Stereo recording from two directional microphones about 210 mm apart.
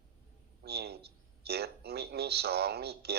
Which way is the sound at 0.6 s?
50° right (ahead or behind).